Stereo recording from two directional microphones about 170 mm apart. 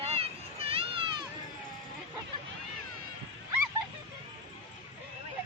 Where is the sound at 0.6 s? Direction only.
35° right (ahead or behind).